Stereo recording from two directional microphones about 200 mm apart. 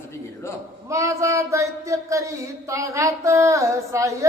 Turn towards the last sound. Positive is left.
turn(degrees=-15)  # may be behind; listen again after turning